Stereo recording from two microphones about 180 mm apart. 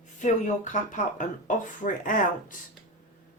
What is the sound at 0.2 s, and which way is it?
A woman's voice, 45° left (ahead or behind).